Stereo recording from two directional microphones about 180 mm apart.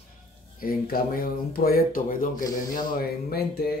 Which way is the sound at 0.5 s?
55° left (ahead or behind).